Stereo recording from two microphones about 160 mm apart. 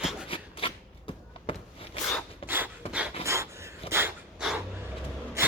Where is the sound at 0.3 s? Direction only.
35° left (ahead or behind).